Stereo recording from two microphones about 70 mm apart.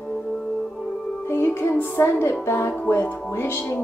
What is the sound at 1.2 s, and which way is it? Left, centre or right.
Music, left.